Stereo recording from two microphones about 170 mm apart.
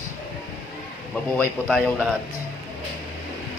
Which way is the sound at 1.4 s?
5° left (ahead or behind).